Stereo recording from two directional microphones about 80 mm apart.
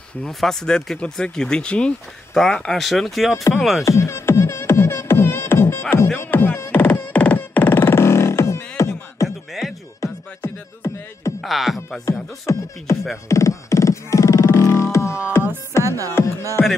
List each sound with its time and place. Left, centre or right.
0.2 s speech: centre
3.8 s music: left
9.5 s music: centre
10.4 s beatboxing: left
11.4 s music: centre
12.1 s speech: left
13.3 s music: left
16.2 s speech: left